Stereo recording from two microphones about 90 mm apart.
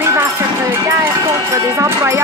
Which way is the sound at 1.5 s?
35° right (ahead or behind).